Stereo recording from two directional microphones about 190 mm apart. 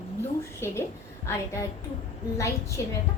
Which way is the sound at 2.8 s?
15° left (ahead or behind).